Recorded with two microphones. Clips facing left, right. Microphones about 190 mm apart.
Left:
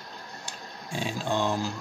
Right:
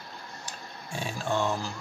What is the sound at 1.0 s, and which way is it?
Speech, 20° left (ahead or behind).